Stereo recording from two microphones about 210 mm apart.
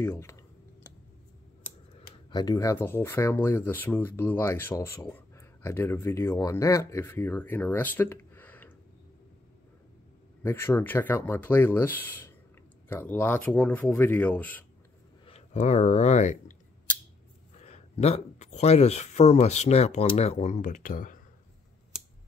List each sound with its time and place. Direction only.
0.0 s speech: 10° left (ahead or behind)
2.3 s speech: 15° left (ahead or behind)
10.4 s speech: 10° left (ahead or behind)
15.2 s speech: 30° left (ahead or behind)
17.6 s speech: 30° left (ahead or behind)